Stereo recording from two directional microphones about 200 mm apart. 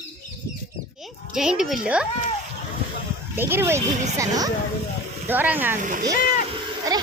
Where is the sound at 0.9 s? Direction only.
Centre (ahead or behind).